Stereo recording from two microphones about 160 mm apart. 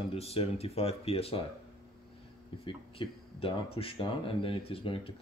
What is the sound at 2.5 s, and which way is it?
Speech, 35° left (ahead or behind).